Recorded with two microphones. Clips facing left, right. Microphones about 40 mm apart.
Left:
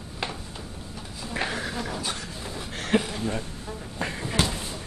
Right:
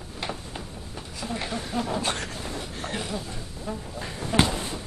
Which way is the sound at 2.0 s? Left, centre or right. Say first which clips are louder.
Right 4 dB; right.